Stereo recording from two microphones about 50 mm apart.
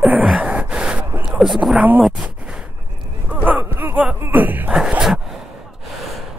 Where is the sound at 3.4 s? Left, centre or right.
Right.